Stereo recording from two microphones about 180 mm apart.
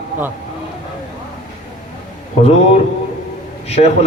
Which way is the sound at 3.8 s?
40° left (ahead or behind).